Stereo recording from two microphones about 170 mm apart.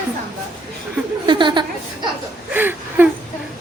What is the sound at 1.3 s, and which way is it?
Speech, 25° right (ahead or behind).